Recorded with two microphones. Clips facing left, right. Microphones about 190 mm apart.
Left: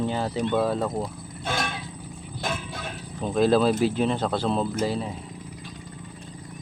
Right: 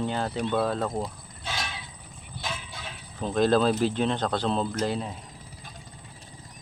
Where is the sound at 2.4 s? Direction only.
50° left (ahead or behind).